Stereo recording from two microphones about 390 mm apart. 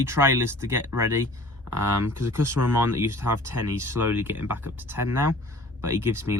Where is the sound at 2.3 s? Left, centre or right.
Centre.